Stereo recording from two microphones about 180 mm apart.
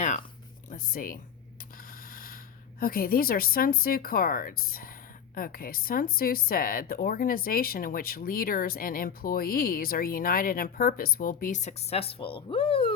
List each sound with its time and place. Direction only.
0.7 s speech: 50° left (ahead or behind)
2.8 s speech: 55° left (ahead or behind); by 12.9 s 30° left (ahead or behind)